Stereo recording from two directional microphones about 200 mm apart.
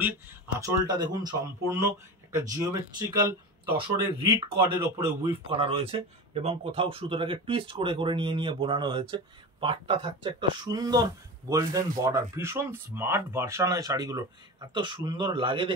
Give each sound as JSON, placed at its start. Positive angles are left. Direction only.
{"t": 0.0, "sound": "speech", "side_deg": -10}
{"t": 4.9, "sound": "speech", "side_deg": -15}
{"t": 5.5, "sound": "speech", "side_deg": -25}